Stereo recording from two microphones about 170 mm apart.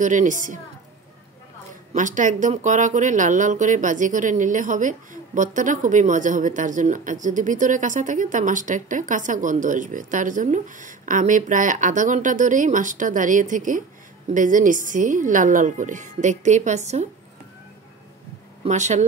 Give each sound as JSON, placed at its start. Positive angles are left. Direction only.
{"t": 0.0, "sound": "speech", "side_deg": -45}
{"t": 2.0, "sound": "speech", "side_deg": -45}
{"t": 18.6, "sound": "speech", "side_deg": -45}